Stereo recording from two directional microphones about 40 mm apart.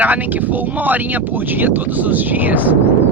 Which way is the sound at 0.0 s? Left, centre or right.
Right.